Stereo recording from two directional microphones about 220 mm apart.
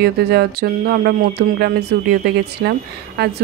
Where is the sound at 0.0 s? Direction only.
45° right (ahead or behind).